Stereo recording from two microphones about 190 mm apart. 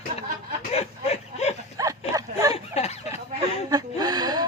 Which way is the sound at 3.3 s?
20° right (ahead or behind).